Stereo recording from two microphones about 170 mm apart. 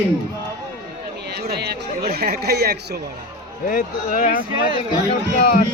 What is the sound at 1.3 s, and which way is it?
Speech, 70° right (ahead or behind).